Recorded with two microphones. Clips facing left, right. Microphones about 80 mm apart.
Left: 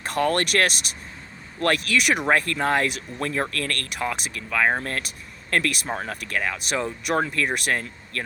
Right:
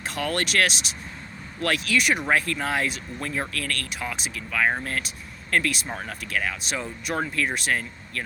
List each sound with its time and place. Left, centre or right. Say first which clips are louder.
0.0 s speech: left 5 dB; left
2.2 s speech: left 3 dB; left
5.9 s speech: left 2 dB; left